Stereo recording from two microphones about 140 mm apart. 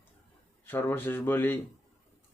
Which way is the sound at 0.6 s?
15° left (ahead or behind).